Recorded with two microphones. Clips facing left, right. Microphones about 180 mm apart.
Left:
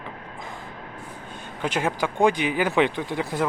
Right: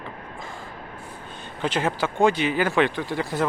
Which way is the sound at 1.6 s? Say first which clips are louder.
Right 1 dB; 10° left (ahead or behind).